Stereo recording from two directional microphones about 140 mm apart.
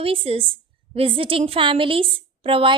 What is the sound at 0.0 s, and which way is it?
A woman's voice, 40° right (ahead or behind).